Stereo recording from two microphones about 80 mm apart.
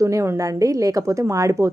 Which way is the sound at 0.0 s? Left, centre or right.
Right.